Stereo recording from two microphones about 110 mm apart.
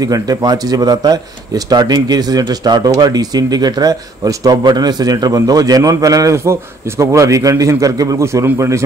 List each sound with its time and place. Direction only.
0.0 s speech: 35° right (ahead or behind)